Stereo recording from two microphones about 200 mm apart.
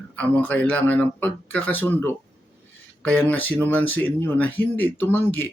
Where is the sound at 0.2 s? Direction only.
10° left (ahead or behind).